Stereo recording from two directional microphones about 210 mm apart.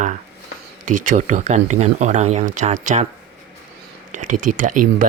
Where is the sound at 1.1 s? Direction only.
35° right (ahead or behind).